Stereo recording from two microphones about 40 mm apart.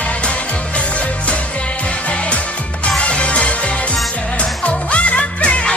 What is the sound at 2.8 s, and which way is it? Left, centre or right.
Music, left.